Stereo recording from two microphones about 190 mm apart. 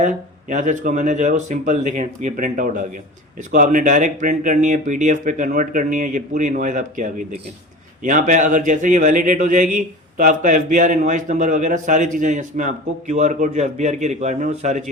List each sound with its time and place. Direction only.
0.0 s a man's voice: 40° right (ahead or behind)